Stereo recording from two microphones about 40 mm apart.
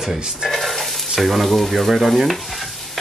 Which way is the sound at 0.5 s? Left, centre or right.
Centre.